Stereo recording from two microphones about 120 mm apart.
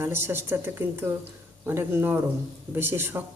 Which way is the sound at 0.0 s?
20° right (ahead or behind).